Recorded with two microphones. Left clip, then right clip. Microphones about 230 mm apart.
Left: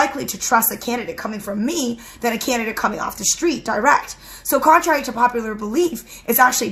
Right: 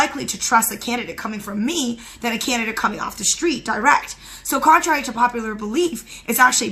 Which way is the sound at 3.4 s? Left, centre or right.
Centre.